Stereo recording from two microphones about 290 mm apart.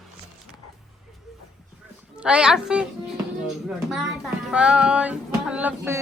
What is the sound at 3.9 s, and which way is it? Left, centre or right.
Child singing, centre.